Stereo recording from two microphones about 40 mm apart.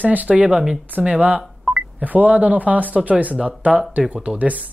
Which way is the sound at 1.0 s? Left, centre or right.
Right.